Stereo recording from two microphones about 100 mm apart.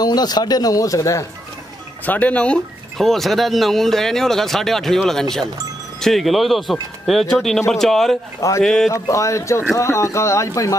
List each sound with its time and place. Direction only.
0.0 s speech: 40° left (ahead or behind)
2.0 s speech: 15° left (ahead or behind)
8.4 s speech: 30° left (ahead or behind)
8.6 s speech: 5° left (ahead or behind)
8.9 s speech: 30° left (ahead or behind)